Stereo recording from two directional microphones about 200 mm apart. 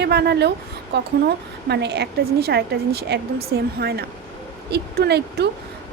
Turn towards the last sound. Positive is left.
turn(degrees=-55)  # may be behind; listen again after turning